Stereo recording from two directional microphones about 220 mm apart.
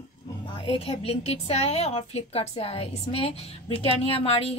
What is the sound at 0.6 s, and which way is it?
A woman's voice, 25° left (ahead or behind).